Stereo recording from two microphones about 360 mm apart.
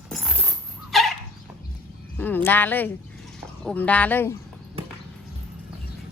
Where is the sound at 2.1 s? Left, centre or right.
Centre.